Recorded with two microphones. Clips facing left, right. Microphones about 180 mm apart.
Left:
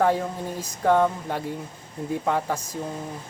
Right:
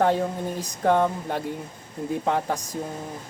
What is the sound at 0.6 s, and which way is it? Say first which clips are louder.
Speech: left 1 dB; 10° right (ahead or behind).